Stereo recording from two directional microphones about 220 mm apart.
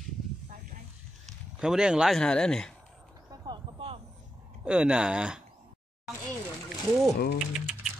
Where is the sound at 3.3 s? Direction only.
20° right (ahead or behind).